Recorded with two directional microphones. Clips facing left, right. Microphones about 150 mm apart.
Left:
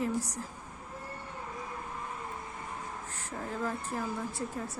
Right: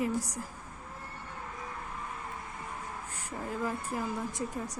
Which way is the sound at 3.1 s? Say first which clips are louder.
Right 1 dB; 10° right (ahead or behind).